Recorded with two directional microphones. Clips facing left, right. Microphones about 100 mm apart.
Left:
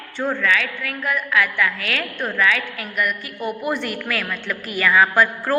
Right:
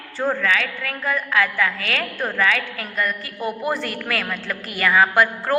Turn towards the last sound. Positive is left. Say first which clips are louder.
# even
turn(degrees=-25)  # may be behind; listen again after turning